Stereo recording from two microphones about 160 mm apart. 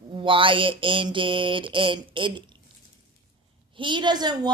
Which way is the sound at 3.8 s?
30° right (ahead or behind).